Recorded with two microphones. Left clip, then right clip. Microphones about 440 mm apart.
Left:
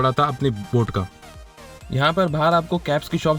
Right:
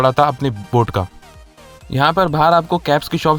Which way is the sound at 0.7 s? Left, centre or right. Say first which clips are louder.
Right 7 dB; right.